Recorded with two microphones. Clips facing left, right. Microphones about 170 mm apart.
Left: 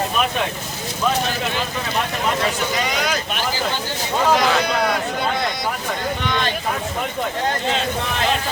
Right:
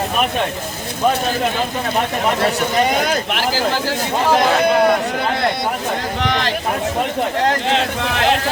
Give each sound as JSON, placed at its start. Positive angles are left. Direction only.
{"t": 2.7, "sound": "speech", "side_deg": -50}
{"t": 6.1, "sound": "speech", "side_deg": -90}
{"t": 7.4, "sound": "speech", "side_deg": -80}